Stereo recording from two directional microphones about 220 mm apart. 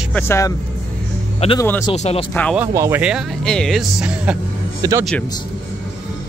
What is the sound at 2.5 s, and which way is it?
Speech, 10° right (ahead or behind).